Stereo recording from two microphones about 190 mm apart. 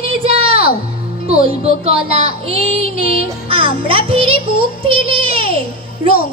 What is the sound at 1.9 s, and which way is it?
A child's voice, 30° right (ahead or behind).